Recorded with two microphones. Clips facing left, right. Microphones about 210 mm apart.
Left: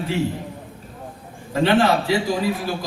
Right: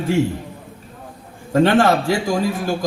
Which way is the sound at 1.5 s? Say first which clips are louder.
Right 3 dB; 45° right (ahead or behind).